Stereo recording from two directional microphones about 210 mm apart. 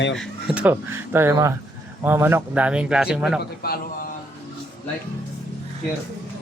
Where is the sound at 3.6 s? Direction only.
45° left (ahead or behind).